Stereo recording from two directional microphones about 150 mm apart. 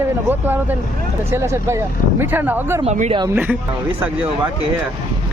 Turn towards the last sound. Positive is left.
turn(degrees=-10)  # may be behind; listen again after turning